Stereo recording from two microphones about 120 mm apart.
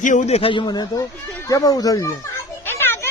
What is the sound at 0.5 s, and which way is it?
Speech, 40° left (ahead or behind).